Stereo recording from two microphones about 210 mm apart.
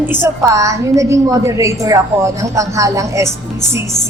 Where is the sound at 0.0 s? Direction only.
10° right (ahead or behind).